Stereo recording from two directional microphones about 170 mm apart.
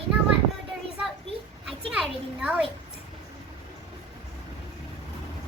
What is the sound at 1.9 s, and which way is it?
Speech, 5° right (ahead or behind).